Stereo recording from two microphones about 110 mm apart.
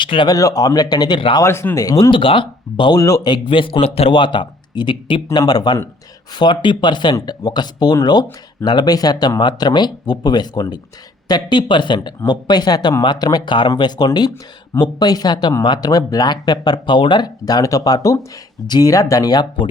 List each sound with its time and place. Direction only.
0.0 s speech: 50° left (ahead or behind)
0.3 s speech: 30° left (ahead or behind)
1.4 s speech: 25° left (ahead or behind)
2.0 s speech: 50° left (ahead or behind)
2.9 s speech: 30° left (ahead or behind)
3.2 s speech: 45° left (ahead or behind)
3.8 s speech: 65° left (ahead or behind); by 5.4 s 50° left (ahead or behind)
5.4 s speech: 35° left (ahead or behind)